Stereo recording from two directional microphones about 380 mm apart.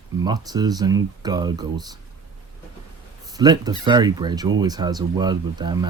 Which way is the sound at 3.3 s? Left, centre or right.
Centre.